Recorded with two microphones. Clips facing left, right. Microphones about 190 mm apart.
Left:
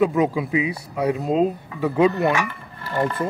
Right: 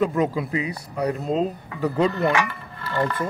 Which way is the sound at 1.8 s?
Centre (ahead or behind).